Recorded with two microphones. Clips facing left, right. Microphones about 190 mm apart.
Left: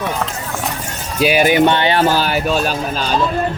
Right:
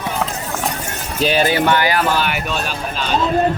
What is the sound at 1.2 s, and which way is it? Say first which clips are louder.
Speech: left 4 dB; 10° left (ahead or behind).